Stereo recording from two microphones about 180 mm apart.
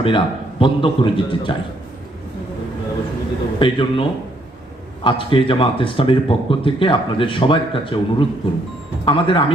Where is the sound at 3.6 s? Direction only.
30° left (ahead or behind).